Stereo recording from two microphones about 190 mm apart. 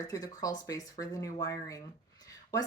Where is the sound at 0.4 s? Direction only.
15° left (ahead or behind).